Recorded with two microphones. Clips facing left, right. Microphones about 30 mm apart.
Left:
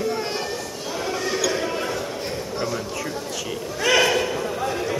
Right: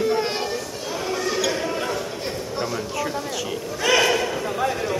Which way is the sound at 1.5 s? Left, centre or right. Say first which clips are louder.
Even; centre.